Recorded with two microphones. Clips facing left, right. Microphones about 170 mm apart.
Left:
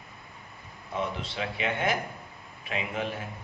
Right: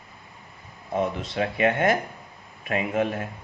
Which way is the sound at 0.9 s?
50° right (ahead or behind).